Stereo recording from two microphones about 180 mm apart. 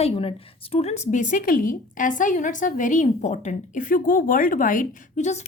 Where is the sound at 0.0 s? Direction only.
35° left (ahead or behind).